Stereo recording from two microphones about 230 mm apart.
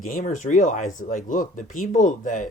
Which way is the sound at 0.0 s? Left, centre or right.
Left.